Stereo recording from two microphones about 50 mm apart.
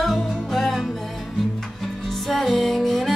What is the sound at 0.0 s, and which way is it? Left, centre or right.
Music, centre.